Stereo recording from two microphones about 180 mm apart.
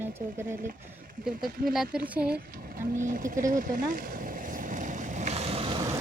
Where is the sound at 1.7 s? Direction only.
Centre (ahead or behind).